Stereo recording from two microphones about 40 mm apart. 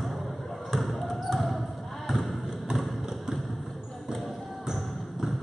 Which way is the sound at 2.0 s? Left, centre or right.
Centre.